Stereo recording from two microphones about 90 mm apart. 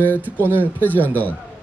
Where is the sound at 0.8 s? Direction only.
20° left (ahead or behind).